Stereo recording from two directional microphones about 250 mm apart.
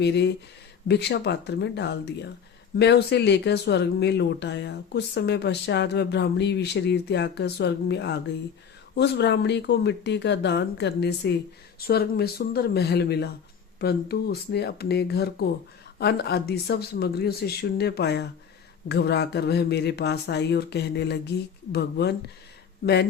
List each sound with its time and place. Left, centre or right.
0.0 s speech: left